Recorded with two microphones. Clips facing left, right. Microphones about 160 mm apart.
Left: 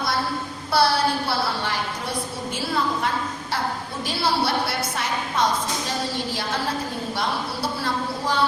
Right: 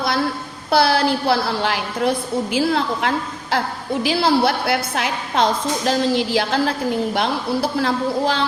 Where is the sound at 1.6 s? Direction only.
90° right.